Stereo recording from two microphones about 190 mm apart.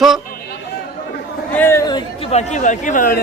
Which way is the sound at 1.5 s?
15° left (ahead or behind).